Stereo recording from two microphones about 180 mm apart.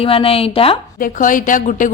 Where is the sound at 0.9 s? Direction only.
50° left (ahead or behind).